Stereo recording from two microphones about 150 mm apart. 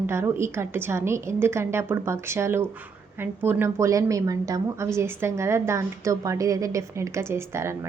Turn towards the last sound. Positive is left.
turn(degrees=-15)  # may be behind; listen again after turning